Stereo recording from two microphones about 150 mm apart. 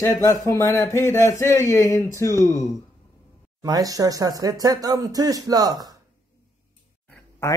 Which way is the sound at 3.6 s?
25° right (ahead or behind).